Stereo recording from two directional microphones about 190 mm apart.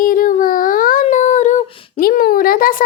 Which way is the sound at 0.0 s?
45° left (ahead or behind).